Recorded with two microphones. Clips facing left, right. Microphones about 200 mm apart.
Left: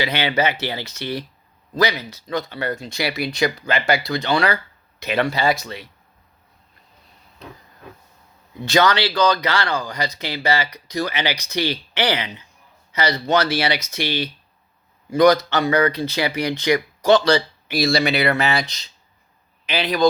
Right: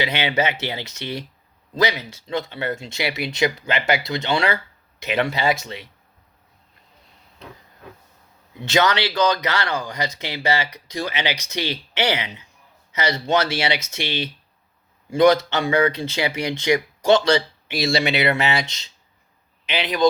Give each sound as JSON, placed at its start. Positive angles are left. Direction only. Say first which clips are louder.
{"t": 0.0, "sound": "speech", "louder": "left 1 dB", "side_deg": -20}
{"t": 8.5, "sound": "speech", "louder": "left 2 dB", "side_deg": -20}